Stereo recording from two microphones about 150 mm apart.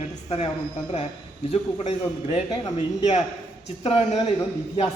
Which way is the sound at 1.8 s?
45° left (ahead or behind).